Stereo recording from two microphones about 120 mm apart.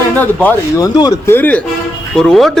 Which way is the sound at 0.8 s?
35° left (ahead or behind).